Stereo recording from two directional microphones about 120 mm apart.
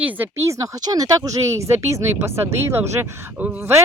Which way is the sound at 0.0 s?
15° right (ahead or behind).